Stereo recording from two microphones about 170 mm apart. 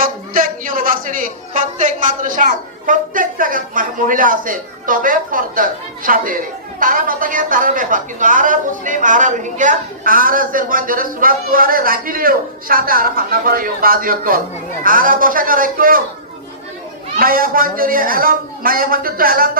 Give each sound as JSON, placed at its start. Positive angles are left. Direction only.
{"t": 0.0, "sound": "a man's voice", "side_deg": -55}
{"t": 17.2, "sound": "a man's voice", "side_deg": -55}